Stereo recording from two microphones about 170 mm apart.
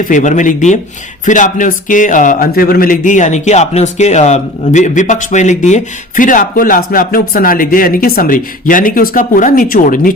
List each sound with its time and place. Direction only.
0.0 s speech: 45° left (ahead or behind)